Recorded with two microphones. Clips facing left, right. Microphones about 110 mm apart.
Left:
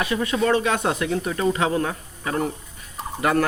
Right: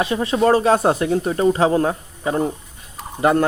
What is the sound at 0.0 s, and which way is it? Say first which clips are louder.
Speech: right 5 dB; 30° right (ahead or behind).